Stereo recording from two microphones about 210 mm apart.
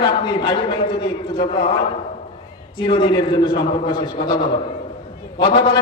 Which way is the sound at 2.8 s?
20° left (ahead or behind).